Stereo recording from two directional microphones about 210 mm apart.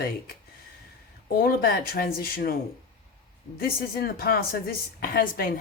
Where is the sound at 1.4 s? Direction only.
45° left (ahead or behind).